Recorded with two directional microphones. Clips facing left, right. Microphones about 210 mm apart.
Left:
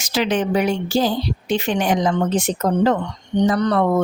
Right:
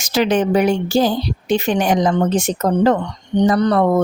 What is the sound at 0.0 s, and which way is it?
Speech, 45° right (ahead or behind).